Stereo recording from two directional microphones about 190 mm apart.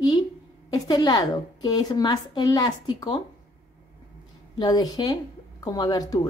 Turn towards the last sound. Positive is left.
turn(degrees=20)  # may be behind; listen again after turning